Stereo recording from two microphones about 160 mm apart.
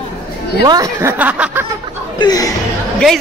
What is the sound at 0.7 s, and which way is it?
Speech, 20° right (ahead or behind).